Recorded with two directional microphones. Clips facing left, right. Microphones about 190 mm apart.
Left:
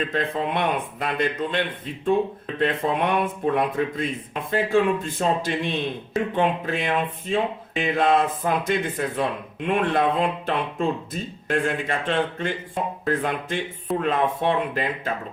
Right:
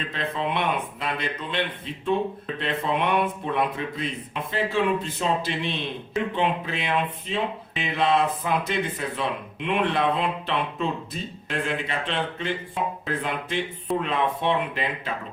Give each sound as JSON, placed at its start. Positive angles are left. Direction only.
{"t": 0.1, "sound": "speech", "side_deg": 50}